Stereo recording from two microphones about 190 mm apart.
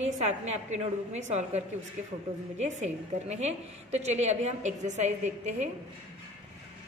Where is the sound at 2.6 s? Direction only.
35° right (ahead or behind).